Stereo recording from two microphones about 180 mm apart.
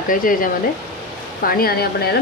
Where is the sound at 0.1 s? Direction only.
50° left (ahead or behind).